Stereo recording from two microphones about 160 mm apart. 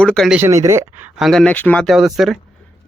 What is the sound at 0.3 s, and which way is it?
Speech, 15° right (ahead or behind).